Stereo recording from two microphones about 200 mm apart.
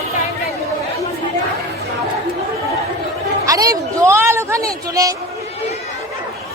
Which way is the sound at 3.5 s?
15° right (ahead or behind).